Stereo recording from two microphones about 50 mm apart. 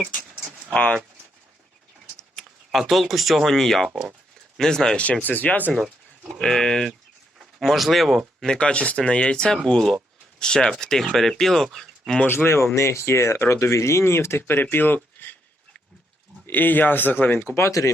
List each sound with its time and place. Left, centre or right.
0.7 s speech: left
2.7 s speech: centre
5.2 s speech: left
5.7 s a sound: centre
6.4 s speech: centre
7.3 s speech: centre
8.4 s speech: centre
12.7 s speech: left
16.5 s speech: left
17.4 s speech: left